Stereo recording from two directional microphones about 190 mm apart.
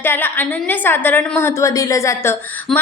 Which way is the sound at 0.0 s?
10° left (ahead or behind).